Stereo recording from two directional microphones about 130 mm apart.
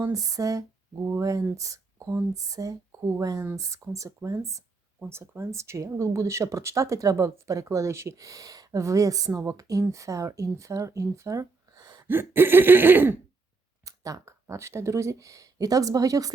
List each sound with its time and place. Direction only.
0.0 s speech: 25° right (ahead or behind)
12.0 s a sound: 15° right (ahead or behind)
13.8 s speech: 25° right (ahead or behind)